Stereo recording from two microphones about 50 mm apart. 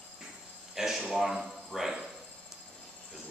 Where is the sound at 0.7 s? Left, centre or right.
Centre.